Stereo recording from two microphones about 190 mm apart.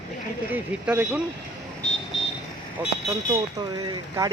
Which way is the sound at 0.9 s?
10° right (ahead or behind).